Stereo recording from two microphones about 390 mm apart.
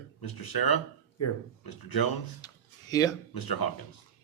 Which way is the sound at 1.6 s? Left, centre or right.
Left.